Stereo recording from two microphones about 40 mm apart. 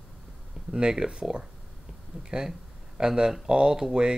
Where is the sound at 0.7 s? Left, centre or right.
Right.